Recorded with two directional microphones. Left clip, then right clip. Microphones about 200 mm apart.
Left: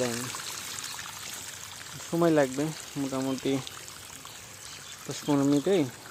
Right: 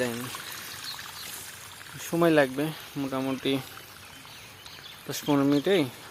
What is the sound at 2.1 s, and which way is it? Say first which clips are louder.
Speech: right 2 dB; 5° right (ahead or behind).